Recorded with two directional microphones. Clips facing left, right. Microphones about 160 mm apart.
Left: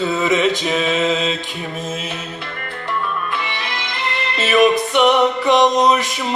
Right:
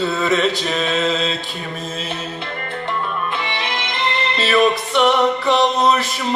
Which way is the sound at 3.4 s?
25° right (ahead or behind).